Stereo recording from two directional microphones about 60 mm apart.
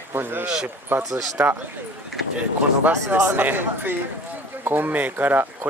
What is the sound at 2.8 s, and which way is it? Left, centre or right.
Speech, right.